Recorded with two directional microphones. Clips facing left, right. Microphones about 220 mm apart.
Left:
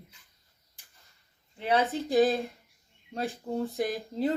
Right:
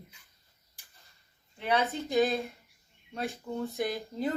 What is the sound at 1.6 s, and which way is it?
Speech, 30° left (ahead or behind).